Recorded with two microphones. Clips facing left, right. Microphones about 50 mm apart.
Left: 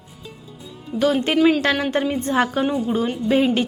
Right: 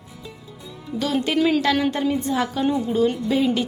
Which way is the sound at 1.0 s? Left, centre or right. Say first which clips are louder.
Left 4 dB; left.